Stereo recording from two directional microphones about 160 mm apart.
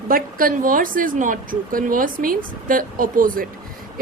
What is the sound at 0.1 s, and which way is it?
A woman's voice, 60° right (ahead or behind).